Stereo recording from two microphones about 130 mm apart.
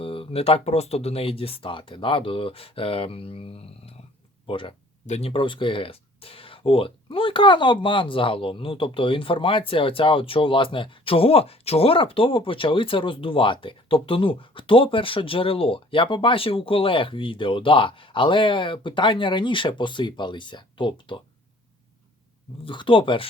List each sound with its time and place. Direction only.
0.0 s speech: 45° left (ahead or behind)
5.0 s speech: 60° left (ahead or behind)
5.3 s speech: 40° left (ahead or behind)
22.6 s speech: 40° left (ahead or behind)